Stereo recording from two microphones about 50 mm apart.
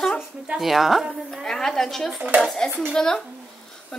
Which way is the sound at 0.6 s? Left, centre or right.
Centre.